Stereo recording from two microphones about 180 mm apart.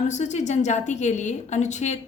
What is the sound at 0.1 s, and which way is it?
A woman's voice, 40° left (ahead or behind).